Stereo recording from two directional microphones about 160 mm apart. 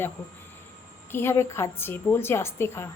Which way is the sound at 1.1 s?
15° left (ahead or behind).